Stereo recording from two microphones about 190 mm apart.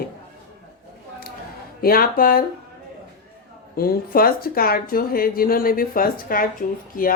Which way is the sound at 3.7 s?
50° left (ahead or behind).